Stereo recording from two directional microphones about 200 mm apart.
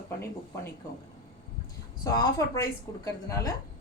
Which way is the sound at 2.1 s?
20° left (ahead or behind).